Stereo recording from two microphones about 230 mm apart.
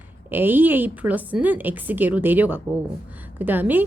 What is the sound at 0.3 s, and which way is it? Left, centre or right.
A woman's voice, centre.